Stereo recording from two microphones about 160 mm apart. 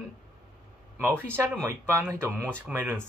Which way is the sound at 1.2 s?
15° right (ahead or behind).